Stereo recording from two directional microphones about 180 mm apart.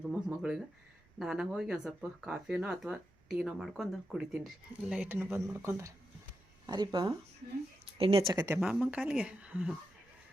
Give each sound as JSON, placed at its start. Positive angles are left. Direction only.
{"t": 0.1, "sound": "speech", "side_deg": -5}
{"t": 6.7, "sound": "a woman's voice", "side_deg": -25}
{"t": 8.5, "sound": "speech", "side_deg": -5}